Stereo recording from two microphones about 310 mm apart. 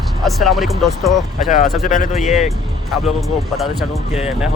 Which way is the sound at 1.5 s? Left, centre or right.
Left.